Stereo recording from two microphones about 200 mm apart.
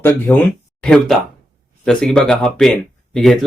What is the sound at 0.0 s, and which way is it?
Speech, 10° left (ahead or behind).